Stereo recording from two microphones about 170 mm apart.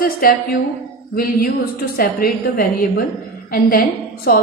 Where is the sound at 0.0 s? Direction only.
60° left (ahead or behind).